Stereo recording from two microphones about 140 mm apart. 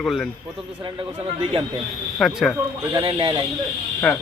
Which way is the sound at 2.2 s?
Centre (ahead or behind).